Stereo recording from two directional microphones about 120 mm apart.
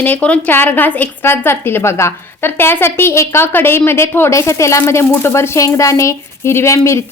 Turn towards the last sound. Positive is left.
turn(degrees=25)  # may be behind; listen again after turning